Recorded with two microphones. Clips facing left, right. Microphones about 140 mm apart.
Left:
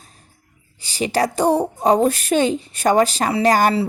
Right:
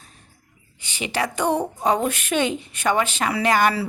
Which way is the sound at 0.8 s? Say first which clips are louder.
Left 6 dB; 35° left (ahead or behind).